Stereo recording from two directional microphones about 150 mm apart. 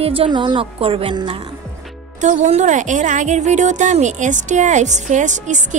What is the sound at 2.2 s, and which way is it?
A woman's voice, 50° right (ahead or behind).